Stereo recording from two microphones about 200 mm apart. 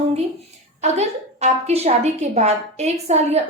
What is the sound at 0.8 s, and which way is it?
A woman's voice, 35° right (ahead or behind).